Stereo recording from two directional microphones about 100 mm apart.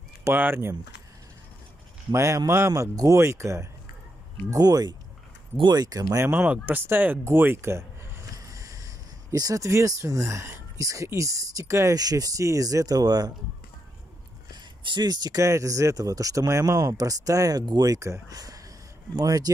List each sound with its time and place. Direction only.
0.2 s speech: 20° right (ahead or behind)
2.1 s speech: 30° right (ahead or behind)
6.2 s speech: 15° right (ahead or behind); by 13.3 s 40° right (ahead or behind)
14.6 s speech: 50° right (ahead or behind)